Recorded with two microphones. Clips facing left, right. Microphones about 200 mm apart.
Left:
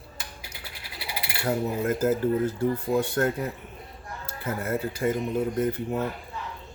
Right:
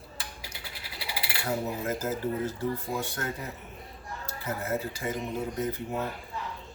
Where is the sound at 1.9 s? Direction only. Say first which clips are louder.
Left 9 dB; 55° left (ahead or behind).